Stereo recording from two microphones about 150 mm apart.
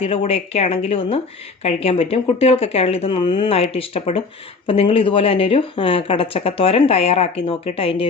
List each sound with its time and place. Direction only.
0.0 s speech: 40° left (ahead or behind)
3.5 s speech: 40° left (ahead or behind)